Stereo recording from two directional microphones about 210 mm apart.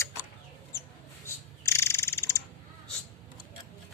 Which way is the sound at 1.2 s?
10° left (ahead or behind).